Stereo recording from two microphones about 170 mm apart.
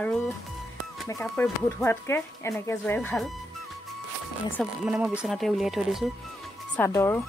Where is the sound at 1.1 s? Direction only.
15° left (ahead or behind).